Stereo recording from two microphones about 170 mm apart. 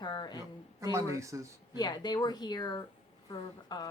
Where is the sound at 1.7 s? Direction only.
25° left (ahead or behind).